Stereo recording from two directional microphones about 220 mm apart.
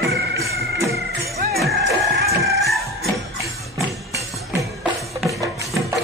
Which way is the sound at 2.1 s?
45° right (ahead or behind).